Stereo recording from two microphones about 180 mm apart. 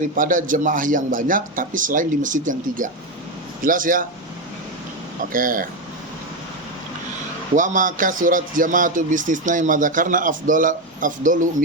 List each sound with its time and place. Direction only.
0.2 s a man's voice: 50° right (ahead or behind)
5.3 s a man's voice: 50° right (ahead or behind)
7.5 s a man's voice: 45° right (ahead or behind)